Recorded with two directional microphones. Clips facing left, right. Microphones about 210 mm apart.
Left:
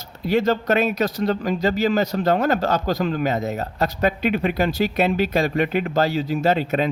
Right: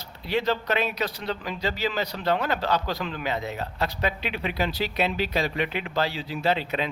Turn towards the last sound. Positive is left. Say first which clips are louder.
# left 6 dB
turn(degrees=45)  # may be behind; listen again after turning